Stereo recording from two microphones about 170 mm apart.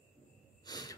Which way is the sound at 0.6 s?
20° left (ahead or behind).